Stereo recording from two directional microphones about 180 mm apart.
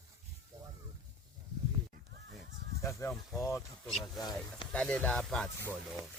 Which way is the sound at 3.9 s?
Centre (ahead or behind).